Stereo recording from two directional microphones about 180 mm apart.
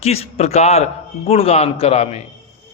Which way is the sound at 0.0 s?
35° left (ahead or behind).